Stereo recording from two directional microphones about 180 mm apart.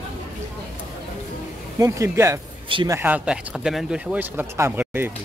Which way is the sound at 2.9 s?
10° right (ahead or behind).